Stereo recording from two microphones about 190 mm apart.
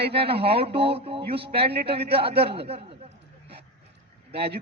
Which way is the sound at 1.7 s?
60° right (ahead or behind).